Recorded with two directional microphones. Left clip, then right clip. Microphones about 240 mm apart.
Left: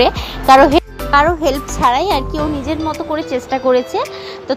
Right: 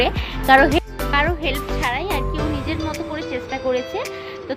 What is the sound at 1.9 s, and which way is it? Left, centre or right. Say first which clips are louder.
Speech: left 11 dB; left.